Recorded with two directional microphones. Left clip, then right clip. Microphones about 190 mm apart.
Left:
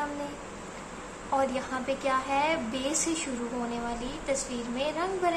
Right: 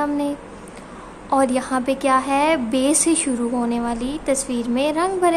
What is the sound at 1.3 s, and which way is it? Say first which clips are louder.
A woman's voice: right 10 dB; 55° right (ahead or behind).